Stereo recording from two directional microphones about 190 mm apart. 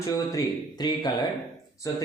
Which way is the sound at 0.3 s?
20° left (ahead or behind).